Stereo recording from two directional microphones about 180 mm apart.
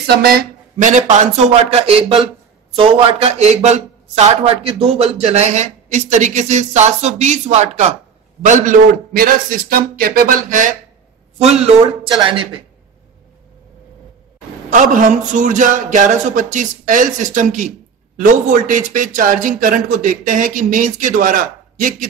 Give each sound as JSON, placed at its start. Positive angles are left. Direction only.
{"t": 0.0, "sound": "speech", "side_deg": -60}
{"t": 0.7, "sound": "speech", "side_deg": -40}
{"t": 8.5, "sound": "a man's voice", "side_deg": -50}
{"t": 14.7, "sound": "a man's voice", "side_deg": -45}